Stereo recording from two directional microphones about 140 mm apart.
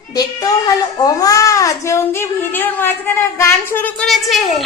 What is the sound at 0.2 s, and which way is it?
A woman's voice, 30° left (ahead or behind).